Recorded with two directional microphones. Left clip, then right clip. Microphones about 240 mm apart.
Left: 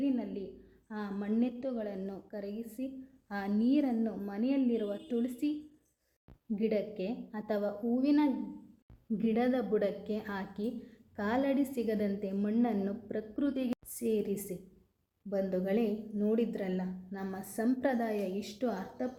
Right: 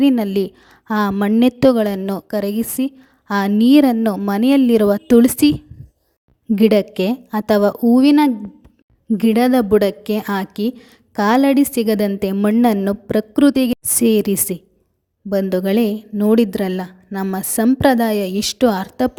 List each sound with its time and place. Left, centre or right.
0.0 s a woman's voice: right
6.6 s a woman's voice: right